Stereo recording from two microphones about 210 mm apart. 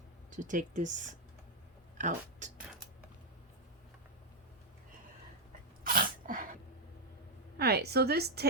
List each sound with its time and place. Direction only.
0.3 s speech: 40° right (ahead or behind)
5.8 s sneeze: 45° right (ahead or behind)
7.6 s a woman's voice: 50° right (ahead or behind)